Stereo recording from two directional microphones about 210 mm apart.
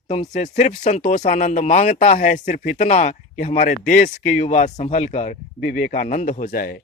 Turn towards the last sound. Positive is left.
turn(degrees=45)  # may be behind; listen again after turning